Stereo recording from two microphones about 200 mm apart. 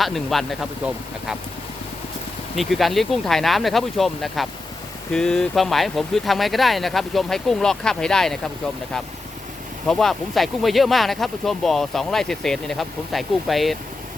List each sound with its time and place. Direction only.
0.0 s speech: centre (ahead or behind)
2.6 s speech: centre (ahead or behind)
9.8 s speech: centre (ahead or behind)